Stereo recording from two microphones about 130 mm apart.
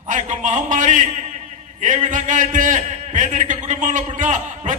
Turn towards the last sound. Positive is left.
turn(degrees=-70)  # may be behind; listen again after turning